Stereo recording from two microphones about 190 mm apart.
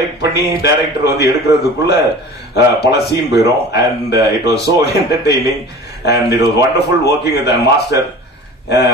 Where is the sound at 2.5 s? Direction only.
60° left (ahead or behind).